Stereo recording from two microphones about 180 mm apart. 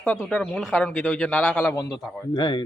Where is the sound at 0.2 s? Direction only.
5° left (ahead or behind).